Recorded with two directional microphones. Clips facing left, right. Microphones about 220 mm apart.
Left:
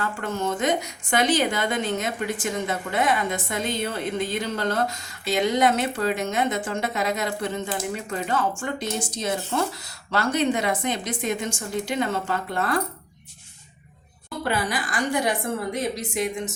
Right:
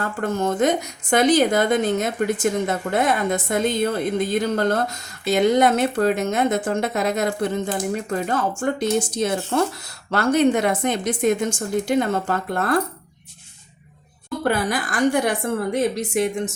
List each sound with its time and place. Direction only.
0.0 s a woman's voice: 45° right (ahead or behind)
14.4 s a woman's voice: 45° right (ahead or behind)